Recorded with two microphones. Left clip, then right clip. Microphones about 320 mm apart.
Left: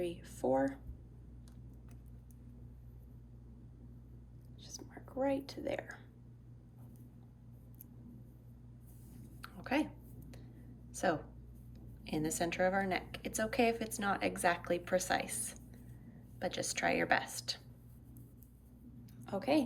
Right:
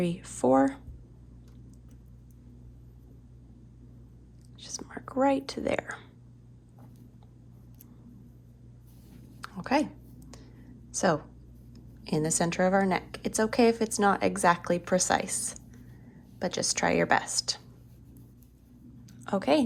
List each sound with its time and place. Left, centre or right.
0.0 s speech: right
4.6 s whispering: right
5.2 s speech: right
9.4 s a sound: centre
10.9 s a woman's voice: centre
19.0 s a sound: right